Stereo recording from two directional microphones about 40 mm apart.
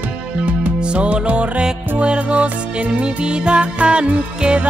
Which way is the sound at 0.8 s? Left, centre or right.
Right.